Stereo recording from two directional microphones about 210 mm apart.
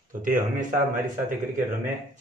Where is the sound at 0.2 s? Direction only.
40° right (ahead or behind).